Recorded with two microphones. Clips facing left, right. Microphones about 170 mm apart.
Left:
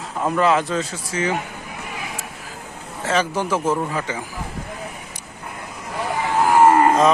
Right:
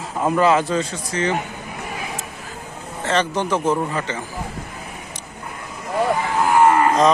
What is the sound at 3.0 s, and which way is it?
Speech, 5° left (ahead or behind).